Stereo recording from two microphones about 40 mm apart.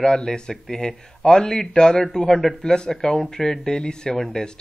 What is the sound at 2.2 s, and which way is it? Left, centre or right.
Speech, centre.